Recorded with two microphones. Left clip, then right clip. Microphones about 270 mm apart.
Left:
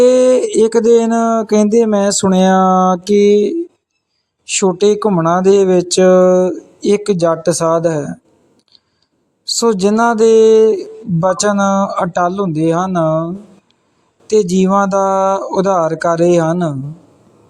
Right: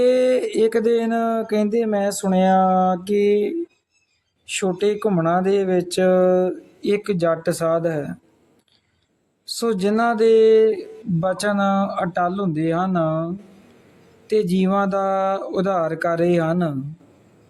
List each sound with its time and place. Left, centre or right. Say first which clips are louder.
0.0 s a sound: left 8 dB; left
9.6 s speech: left 8 dB; centre
14.3 s speech: left 8 dB; centre